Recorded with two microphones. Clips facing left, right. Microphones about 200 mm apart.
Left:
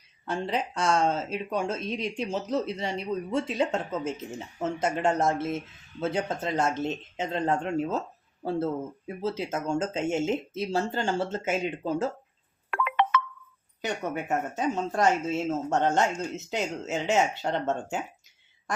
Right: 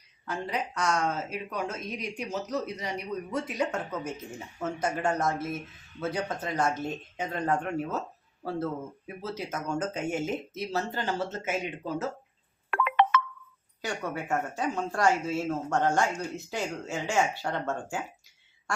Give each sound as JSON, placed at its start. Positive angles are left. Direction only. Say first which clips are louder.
{"t": 0.3, "sound": "speech", "louder": "left 3 dB", "side_deg": 30}
{"t": 12.7, "sound": "music", "louder": "right 1 dB", "side_deg": -45}
{"t": 13.8, "sound": "speech", "louder": "left 2 dB", "side_deg": 20}